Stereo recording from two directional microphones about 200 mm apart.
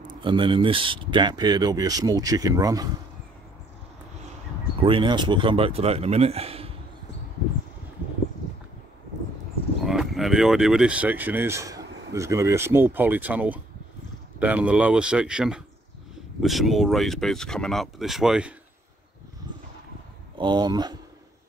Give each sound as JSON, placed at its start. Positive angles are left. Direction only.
{"t": 0.2, "sound": "speech", "side_deg": -25}
{"t": 4.8, "sound": "speech", "side_deg": -25}
{"t": 9.8, "sound": "speech", "side_deg": 0}
{"t": 19.5, "sound": "a sound", "side_deg": -20}
{"t": 20.3, "sound": "speech", "side_deg": -20}